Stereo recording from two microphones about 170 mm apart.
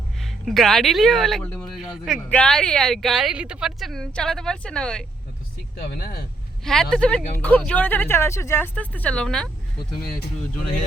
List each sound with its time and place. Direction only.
0.2 s speech: centre (ahead or behind)
5.8 s speech: 65° left (ahead or behind)
6.9 s speech: 5° left (ahead or behind)